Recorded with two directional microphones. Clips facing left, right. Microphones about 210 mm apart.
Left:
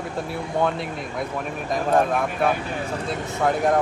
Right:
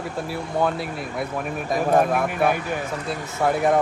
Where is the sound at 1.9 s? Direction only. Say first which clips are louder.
Right 1 dB; 5° right (ahead or behind).